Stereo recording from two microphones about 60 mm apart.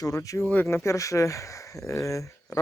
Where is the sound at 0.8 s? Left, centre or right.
Left.